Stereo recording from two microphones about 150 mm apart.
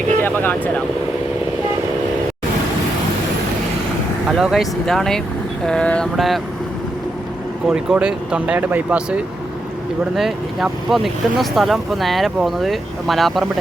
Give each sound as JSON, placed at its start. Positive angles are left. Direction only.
{"t": 0.2, "sound": "vehicle", "side_deg": 15}
{"t": 4.3, "sound": "speech", "side_deg": 0}
{"t": 7.7, "sound": "speech", "side_deg": -5}